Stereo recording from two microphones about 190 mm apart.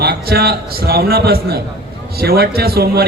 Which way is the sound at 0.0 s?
55° right (ahead or behind).